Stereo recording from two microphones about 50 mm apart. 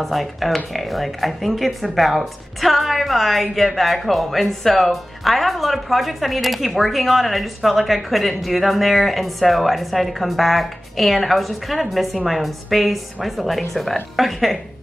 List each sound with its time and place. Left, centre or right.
0.0 s speech: centre